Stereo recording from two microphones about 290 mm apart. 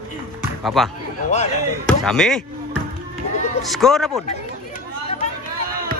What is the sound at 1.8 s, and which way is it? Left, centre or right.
Speech, centre.